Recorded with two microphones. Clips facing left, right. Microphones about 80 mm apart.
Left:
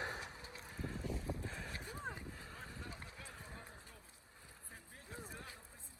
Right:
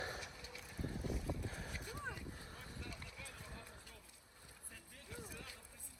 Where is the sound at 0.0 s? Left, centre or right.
Left.